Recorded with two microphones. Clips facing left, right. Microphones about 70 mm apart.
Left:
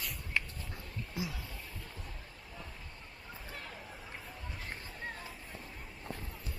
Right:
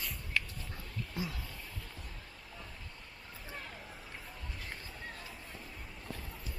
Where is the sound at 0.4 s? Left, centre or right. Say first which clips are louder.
Even; left.